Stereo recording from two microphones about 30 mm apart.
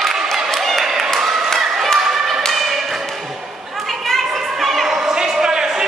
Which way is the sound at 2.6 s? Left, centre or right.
Centre.